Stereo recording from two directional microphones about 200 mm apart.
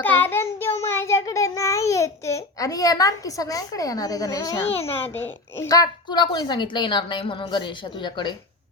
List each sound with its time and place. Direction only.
0.0 s child singing: 10° left (ahead or behind)
4.8 s a woman's voice: 30° left (ahead or behind)
5.1 s a woman's voice: 10° left (ahead or behind)